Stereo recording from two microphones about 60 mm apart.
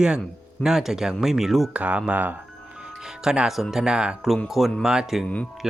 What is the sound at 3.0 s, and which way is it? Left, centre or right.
Speech, centre.